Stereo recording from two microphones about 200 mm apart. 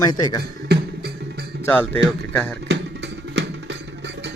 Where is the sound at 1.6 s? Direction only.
10° left (ahead or behind).